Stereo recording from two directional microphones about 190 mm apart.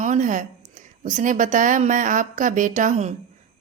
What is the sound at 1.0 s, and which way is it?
A woman's voice, 40° right (ahead or behind).